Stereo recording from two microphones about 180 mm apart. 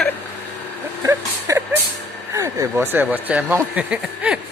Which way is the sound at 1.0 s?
15° right (ahead or behind).